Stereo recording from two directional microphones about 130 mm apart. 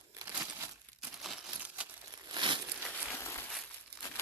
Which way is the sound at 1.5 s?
10° right (ahead or behind).